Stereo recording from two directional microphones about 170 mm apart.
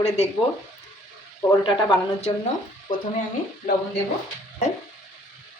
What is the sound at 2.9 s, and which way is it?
Speech, 50° left (ahead or behind).